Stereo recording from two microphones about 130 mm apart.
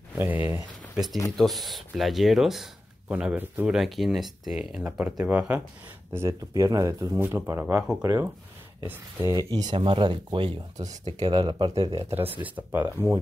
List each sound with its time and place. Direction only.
0.2 s a sound: 15° right (ahead or behind)
0.9 s speech: centre (ahead or behind)
6.1 s speech: 25° right (ahead or behind)
9.3 s speech: 25° right (ahead or behind)
11.7 s speech: 55° right (ahead or behind)
12.4 s speech: 10° right (ahead or behind)